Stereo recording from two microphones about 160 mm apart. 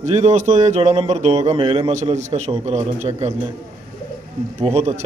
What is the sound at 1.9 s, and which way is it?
A man's voice, 45° right (ahead or behind).